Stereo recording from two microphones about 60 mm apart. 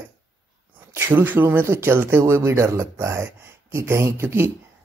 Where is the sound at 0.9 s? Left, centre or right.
Right.